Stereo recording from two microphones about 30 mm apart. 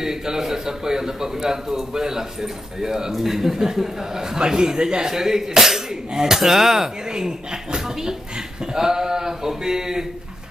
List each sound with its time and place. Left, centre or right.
0.0 s a man's voice: centre
4.4 s a man's voice: right
7.1 s a woman's voice: right